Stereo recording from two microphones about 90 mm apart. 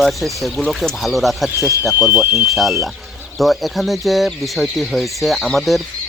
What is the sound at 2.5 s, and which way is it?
Speech, centre (ahead or behind).